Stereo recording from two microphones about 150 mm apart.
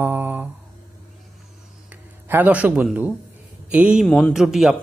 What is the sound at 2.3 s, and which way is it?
Mantra, 10° right (ahead or behind).